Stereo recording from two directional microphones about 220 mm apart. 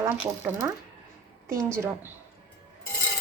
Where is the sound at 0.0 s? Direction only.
10° right (ahead or behind).